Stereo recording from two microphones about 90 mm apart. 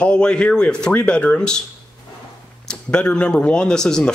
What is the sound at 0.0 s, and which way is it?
Speech, 10° left (ahead or behind).